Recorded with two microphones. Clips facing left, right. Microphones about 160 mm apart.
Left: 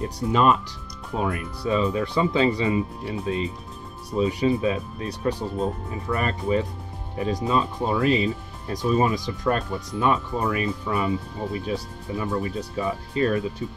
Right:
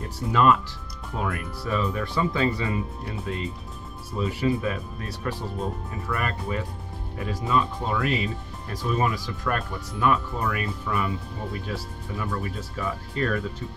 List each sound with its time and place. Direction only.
0.3 s speech: 20° left (ahead or behind)